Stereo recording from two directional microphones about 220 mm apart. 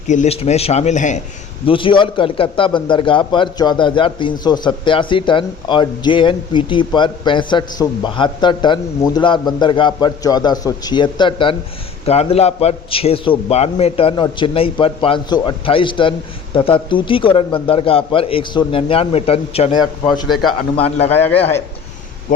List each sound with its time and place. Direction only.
0.1 s a man's voice: 30° left (ahead or behind)
20.2 s a man's voice: centre (ahead or behind)
20.7 s a man's voice: 25° left (ahead or behind)